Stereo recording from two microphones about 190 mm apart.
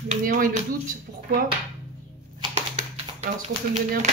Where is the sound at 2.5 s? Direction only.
35° right (ahead or behind).